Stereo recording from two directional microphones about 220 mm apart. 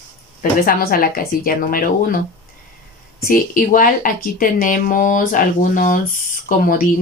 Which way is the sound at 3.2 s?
40° left (ahead or behind).